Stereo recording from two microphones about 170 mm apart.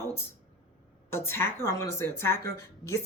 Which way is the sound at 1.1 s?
15° left (ahead or behind).